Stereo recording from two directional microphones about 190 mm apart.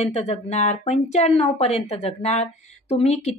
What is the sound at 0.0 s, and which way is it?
Speech, 35° left (ahead or behind).